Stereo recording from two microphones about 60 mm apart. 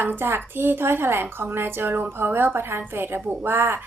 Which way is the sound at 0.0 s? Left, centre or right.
Right.